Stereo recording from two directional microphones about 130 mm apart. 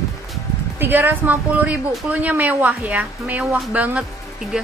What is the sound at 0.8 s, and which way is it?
A woman's voice, 15° right (ahead or behind).